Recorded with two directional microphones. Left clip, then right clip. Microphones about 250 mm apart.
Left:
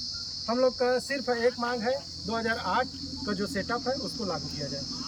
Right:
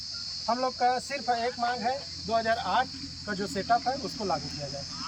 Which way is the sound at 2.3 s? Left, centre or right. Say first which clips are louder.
Right 2 dB; centre.